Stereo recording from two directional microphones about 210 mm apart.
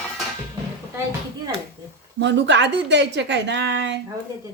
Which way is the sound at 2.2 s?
55° right (ahead or behind).